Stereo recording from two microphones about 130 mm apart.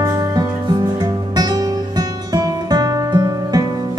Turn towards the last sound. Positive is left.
turn(degrees=-30)  # may be behind; listen again after turning